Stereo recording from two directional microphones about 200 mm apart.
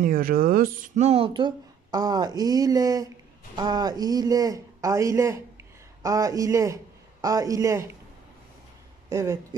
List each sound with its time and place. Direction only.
0.0 s a man's voice: 45° right (ahead or behind); by 7.9 s 15° right (ahead or behind)
9.1 s speech: 15° right (ahead or behind)